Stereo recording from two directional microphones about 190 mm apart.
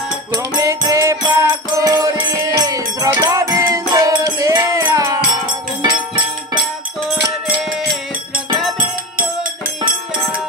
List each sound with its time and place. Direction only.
0.4 s music: 15° right (ahead or behind)
8.7 s music: 45° right (ahead or behind)